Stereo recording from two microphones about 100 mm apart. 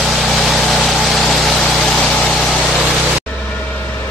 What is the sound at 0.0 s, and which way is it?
Vehicle, centre (ahead or behind).